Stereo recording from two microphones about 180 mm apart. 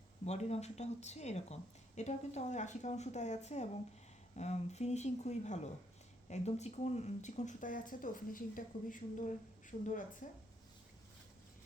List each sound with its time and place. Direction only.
0.3 s speech: 35° left (ahead or behind)